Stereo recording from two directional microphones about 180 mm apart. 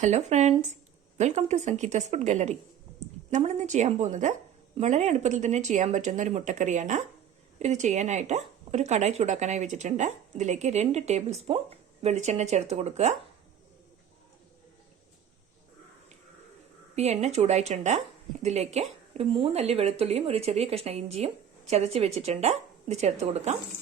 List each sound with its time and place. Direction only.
0.0 s speech: 40° right (ahead or behind)
16.9 s speech: 35° right (ahead or behind)